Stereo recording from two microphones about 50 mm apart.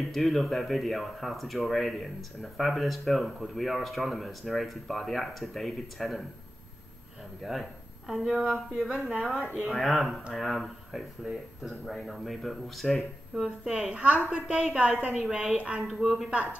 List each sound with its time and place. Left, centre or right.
0.1 s speech: centre
7.5 s speech: centre
9.8 s speech: centre
13.3 s speech: centre
13.7 s a woman's voice: right
15.9 s a woman's voice: centre